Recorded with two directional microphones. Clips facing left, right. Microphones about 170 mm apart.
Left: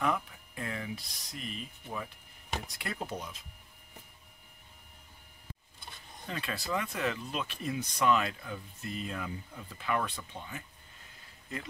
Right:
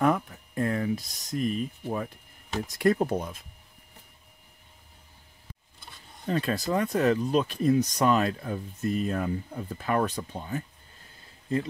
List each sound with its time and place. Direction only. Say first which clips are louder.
0.0 s speech: right 7 dB; 45° right (ahead or behind)
6.2 s speech: right 10 dB; 40° right (ahead or behind)